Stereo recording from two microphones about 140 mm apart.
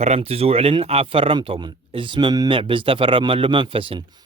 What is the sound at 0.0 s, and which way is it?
Speech, 45° right (ahead or behind).